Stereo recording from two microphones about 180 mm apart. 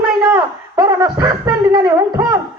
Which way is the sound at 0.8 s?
20° right (ahead or behind).